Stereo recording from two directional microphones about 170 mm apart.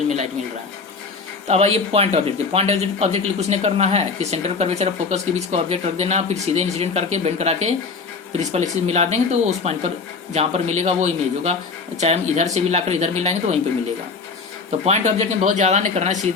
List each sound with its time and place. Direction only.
1.5 s speech: 40° right (ahead or behind)
14.7 s speech: 40° right (ahead or behind)